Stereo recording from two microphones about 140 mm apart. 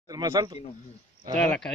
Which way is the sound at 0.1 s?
25° right (ahead or behind).